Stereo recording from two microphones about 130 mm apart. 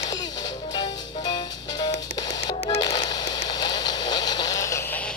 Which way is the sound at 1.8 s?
30° left (ahead or behind).